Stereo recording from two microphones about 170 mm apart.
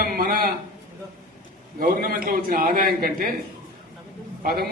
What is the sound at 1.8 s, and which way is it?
A man's voice, 55° right (ahead or behind).